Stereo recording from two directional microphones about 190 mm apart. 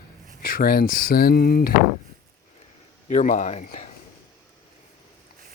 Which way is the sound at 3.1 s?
40° left (ahead or behind).